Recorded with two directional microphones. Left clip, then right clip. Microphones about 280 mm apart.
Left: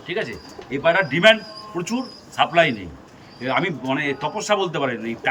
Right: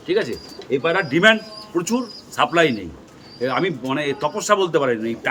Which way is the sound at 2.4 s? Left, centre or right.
Centre.